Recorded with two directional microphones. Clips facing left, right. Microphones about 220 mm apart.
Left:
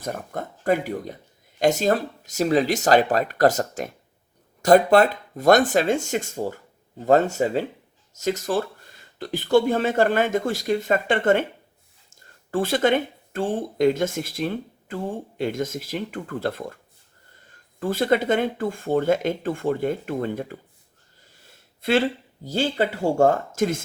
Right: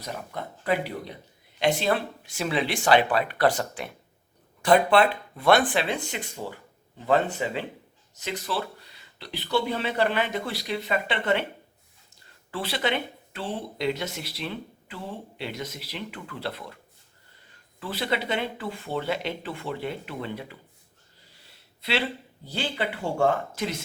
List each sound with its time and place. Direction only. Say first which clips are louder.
0.0 s speech: left 5 dB; 50° left (ahead or behind)
17.7 s speech: left 8 dB; 45° left (ahead or behind)